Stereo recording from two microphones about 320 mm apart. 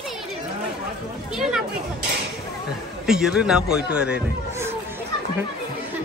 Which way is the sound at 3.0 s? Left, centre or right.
Centre.